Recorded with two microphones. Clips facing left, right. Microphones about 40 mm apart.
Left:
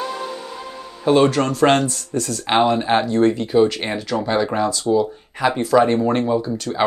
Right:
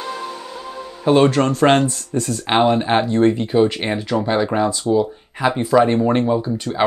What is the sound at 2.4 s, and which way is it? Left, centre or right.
Speech, centre.